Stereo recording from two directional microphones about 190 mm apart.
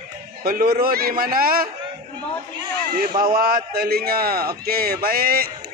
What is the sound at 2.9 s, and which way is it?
Speech, 50° right (ahead or behind).